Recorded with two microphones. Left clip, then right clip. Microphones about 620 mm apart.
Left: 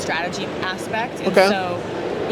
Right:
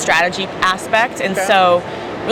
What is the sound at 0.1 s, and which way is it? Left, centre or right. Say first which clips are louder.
Speech: right 11 dB; right.